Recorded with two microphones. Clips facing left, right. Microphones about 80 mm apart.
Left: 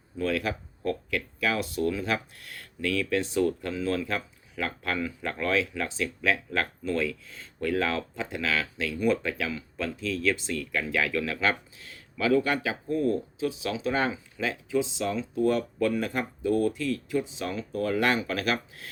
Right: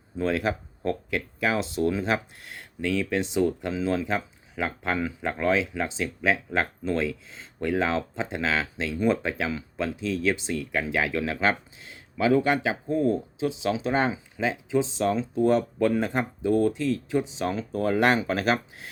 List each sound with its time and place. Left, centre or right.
0.2 s speech: right
14.8 s speech: right